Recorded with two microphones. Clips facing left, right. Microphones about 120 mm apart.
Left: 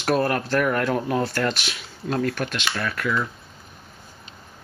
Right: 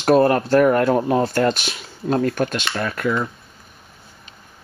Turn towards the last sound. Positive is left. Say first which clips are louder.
# right 4 dB
turn(degrees=-30)  # may be behind; listen again after turning